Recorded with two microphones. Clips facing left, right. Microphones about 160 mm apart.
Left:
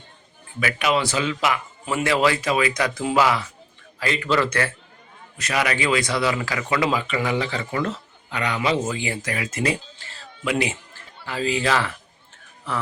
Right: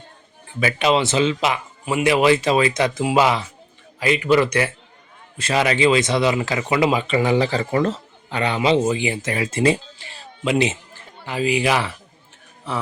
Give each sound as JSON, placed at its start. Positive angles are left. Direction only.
{"t": 0.6, "sound": "a man's voice", "side_deg": -25}
{"t": 5.4, "sound": "speech", "side_deg": -30}
{"t": 10.1, "sound": "music", "side_deg": -20}
{"t": 11.3, "sound": "a man's voice", "side_deg": -15}